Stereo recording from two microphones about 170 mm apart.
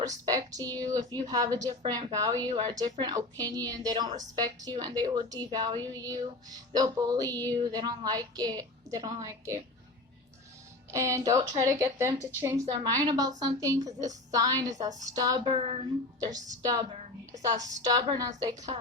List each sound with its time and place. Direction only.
0.0 s a woman's voice: 20° right (ahead or behind)
10.9 s a woman's voice: 20° right (ahead or behind)